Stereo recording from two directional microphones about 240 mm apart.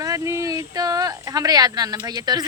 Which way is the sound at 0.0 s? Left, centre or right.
Centre.